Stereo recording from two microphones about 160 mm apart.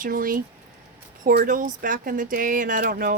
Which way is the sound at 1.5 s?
55° right (ahead or behind).